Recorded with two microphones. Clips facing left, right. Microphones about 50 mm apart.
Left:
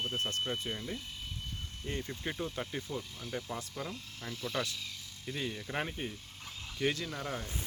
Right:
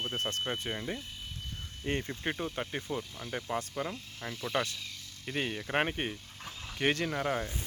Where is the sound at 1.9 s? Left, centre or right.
Right.